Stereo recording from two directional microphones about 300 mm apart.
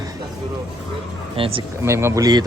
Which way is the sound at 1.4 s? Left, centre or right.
Centre.